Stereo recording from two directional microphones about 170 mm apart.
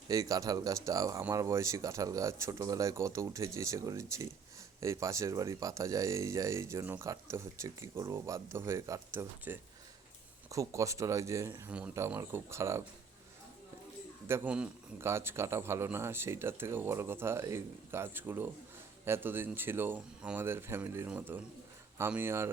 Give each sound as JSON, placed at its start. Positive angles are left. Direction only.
{"t": 0.1, "sound": "speech", "side_deg": -20}
{"t": 14.3, "sound": "speech", "side_deg": -10}